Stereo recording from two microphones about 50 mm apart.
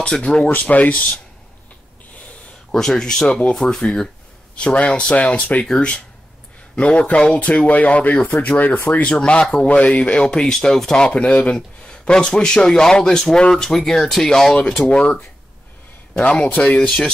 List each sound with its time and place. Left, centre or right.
0.0 s speech: left
2.7 s speech: centre; by 9.0 s left
9.0 s speech: left; by 14.5 s centre
14.8 s speech: left
16.2 s speech: centre
16.4 s speech: left